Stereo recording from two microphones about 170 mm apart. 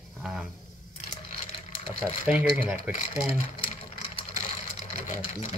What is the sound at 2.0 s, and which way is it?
Speech, 5° right (ahead or behind).